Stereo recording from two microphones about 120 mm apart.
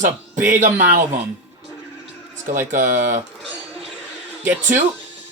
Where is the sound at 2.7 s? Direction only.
90° right.